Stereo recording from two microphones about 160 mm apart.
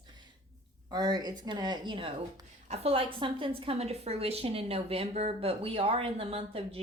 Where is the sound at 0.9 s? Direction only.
25° right (ahead or behind).